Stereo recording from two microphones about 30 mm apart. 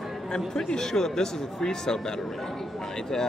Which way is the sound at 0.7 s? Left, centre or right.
Centre.